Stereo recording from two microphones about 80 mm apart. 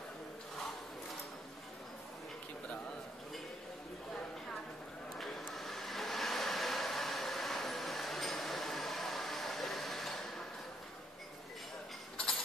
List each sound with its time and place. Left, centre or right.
5.1 s vehicle: centre